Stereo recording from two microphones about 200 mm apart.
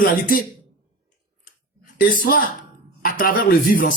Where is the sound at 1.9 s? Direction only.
45° left (ahead or behind).